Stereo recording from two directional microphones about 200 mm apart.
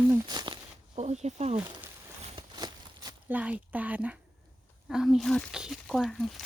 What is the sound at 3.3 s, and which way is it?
A woman's voice, 5° right (ahead or behind).